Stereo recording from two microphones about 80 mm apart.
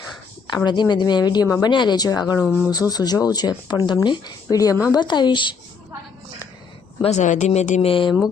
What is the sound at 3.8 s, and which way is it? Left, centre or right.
Speech, left.